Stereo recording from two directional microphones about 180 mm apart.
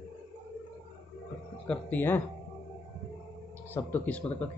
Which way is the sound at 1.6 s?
5° left (ahead or behind).